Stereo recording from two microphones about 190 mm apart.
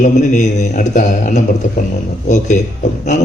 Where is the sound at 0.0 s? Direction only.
40° left (ahead or behind).